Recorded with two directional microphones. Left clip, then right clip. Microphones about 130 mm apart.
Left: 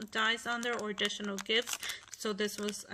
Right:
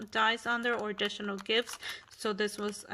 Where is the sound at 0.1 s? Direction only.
25° right (ahead or behind).